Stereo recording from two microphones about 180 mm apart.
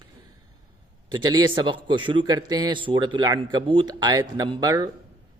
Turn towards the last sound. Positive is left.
turn(degrees=-20)  # may be behind; listen again after turning